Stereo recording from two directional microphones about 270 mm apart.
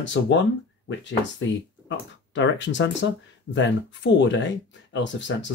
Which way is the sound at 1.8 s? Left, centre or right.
Left.